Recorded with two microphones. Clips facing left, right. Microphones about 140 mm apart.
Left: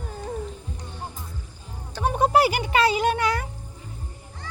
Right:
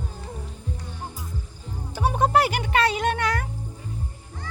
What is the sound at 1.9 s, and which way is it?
Music, 5° right (ahead or behind).